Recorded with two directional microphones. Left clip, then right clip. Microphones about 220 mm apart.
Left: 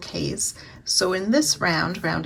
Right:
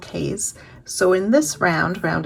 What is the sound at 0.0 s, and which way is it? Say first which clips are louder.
Speech: right 2 dB; 5° left (ahead or behind).